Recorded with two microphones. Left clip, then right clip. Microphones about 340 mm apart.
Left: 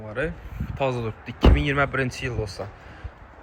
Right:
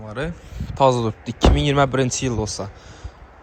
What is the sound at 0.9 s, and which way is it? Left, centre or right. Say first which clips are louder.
Speech: right 7 dB; right.